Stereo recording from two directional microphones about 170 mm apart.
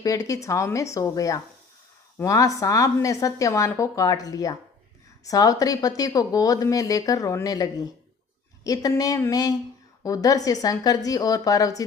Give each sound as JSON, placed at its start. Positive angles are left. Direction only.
{"t": 0.0, "sound": "speech", "side_deg": 20}